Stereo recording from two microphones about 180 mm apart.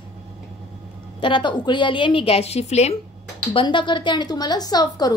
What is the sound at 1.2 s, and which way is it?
A woman's voice, 25° left (ahead or behind).